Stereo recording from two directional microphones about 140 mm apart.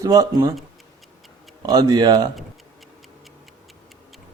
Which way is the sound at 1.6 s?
30° right (ahead or behind).